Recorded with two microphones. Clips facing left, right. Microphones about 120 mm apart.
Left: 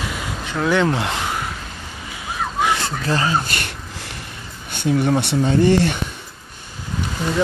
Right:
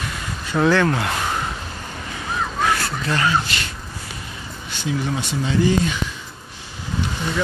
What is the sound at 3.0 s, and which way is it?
Speech, 35° left (ahead or behind).